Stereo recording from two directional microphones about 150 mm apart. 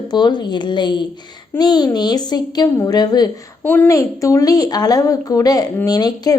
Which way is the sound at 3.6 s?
10° left (ahead or behind).